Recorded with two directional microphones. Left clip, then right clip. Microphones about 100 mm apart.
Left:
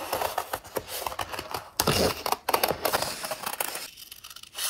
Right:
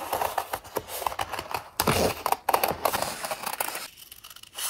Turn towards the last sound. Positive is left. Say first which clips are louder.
# right 1 dB
turn(degrees=-5)  # may be behind; listen again after turning